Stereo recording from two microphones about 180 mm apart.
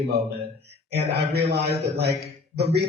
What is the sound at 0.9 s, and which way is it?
A man's voice, 65° right (ahead or behind).